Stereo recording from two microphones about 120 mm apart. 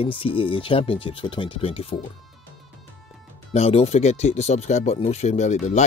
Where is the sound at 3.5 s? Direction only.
60° left (ahead or behind); by 5.8 s 75° left (ahead or behind).